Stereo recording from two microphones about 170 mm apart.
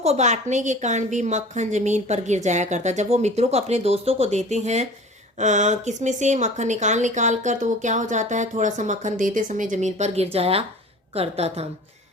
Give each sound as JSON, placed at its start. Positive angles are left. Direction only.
{"t": 0.0, "sound": "a woman's voice", "side_deg": -40}